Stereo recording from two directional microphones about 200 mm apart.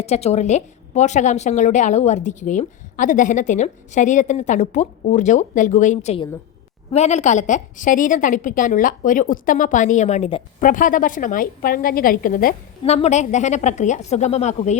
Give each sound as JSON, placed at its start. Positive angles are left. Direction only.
{"t": 0.0, "sound": "a woman's voice", "side_deg": 30}
{"t": 10.6, "sound": "a woman's voice", "side_deg": 40}
{"t": 12.8, "sound": "a woman's voice", "side_deg": 30}